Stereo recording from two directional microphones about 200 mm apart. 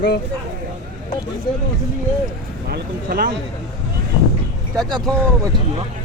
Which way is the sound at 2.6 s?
50° right (ahead or behind).